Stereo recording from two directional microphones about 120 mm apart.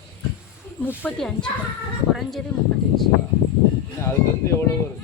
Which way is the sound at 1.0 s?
5° left (ahead or behind).